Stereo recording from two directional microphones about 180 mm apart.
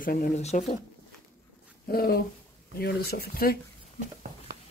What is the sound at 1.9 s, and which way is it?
Speech, 60° left (ahead or behind).